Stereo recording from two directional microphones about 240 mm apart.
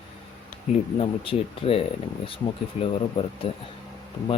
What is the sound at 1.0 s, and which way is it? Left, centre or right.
Speech, left.